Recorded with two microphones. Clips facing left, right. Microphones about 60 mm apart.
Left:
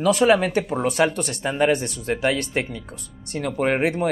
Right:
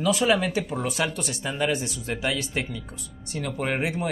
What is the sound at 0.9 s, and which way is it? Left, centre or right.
Speech, left.